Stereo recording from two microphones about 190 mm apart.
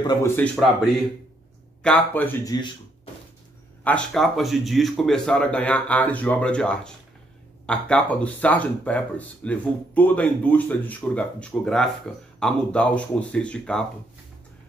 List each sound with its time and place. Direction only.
0.0 s speech: 20° left (ahead or behind)
1.8 s speech: 5° left (ahead or behind)
3.8 s a man's voice: 5° left (ahead or behind)